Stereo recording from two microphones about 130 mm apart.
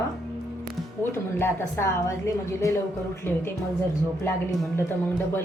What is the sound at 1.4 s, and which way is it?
A woman's voice, 20° left (ahead or behind).